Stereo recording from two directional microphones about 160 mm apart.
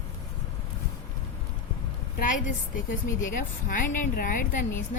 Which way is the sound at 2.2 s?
55° left (ahead or behind).